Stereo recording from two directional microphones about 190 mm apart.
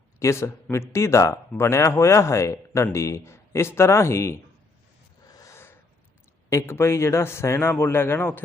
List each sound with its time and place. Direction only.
0.2 s speech: 15° left (ahead or behind)
5.3 s owl: 15° left (ahead or behind)
6.5 s speech: 15° left (ahead or behind)